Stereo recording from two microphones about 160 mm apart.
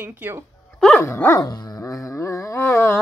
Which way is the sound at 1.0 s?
15° left (ahead or behind).